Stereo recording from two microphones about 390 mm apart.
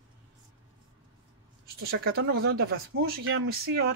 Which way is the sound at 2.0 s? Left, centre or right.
Right.